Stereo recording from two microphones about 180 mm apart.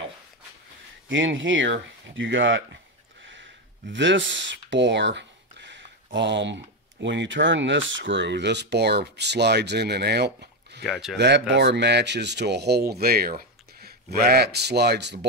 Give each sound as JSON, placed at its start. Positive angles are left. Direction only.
{"t": 1.0, "sound": "speech", "side_deg": -90}
{"t": 3.9, "sound": "speech", "side_deg": -90}
{"t": 10.8, "sound": "speech", "side_deg": 0}
{"t": 11.1, "sound": "speech", "side_deg": -70}